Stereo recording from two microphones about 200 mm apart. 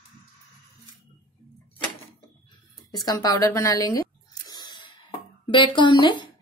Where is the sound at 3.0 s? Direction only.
20° left (ahead or behind).